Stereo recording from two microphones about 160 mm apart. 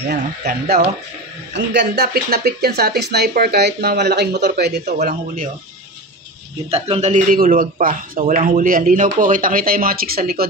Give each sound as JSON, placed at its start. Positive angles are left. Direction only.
{"t": 0.1, "sound": "speech", "side_deg": -90}
{"t": 5.0, "sound": "speech", "side_deg": -60}
{"t": 6.7, "sound": "speech", "side_deg": -40}